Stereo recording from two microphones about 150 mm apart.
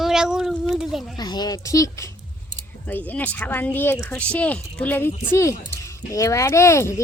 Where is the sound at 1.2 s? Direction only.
25° left (ahead or behind).